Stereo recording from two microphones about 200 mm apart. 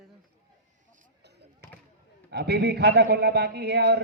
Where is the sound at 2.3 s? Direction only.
55° right (ahead or behind).